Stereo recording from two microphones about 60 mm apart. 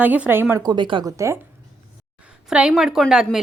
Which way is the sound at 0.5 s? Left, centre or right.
Right.